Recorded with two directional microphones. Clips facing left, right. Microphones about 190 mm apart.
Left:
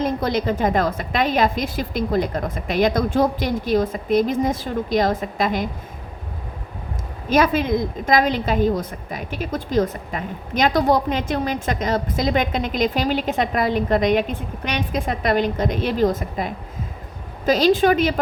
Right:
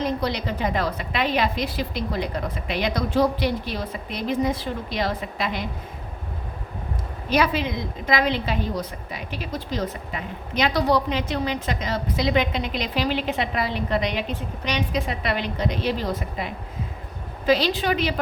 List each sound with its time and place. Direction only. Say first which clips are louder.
0.0 s a woman's voice: left 4 dB; 45° left (ahead or behind)
7.3 s a woman's voice: left 4 dB; 45° left (ahead or behind)